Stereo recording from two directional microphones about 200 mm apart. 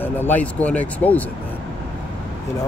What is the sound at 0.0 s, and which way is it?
Speech, 10° left (ahead or behind).